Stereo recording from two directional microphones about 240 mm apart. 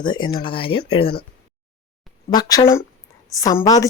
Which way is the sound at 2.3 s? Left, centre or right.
Centre.